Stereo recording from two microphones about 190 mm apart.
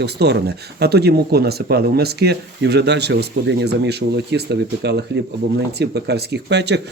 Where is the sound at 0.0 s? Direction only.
60° right (ahead or behind).